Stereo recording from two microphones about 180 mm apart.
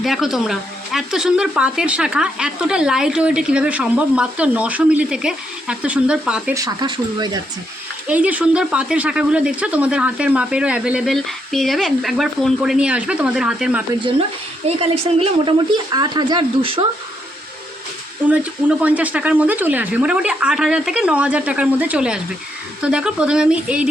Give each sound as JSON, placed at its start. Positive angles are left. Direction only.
{"t": 0.0, "sound": "speech", "side_deg": 0}
{"t": 6.5, "sound": "speech", "side_deg": -20}
{"t": 8.0, "sound": "speech", "side_deg": -10}
{"t": 14.8, "sound": "speech", "side_deg": -30}
{"t": 18.8, "sound": "speech", "side_deg": -10}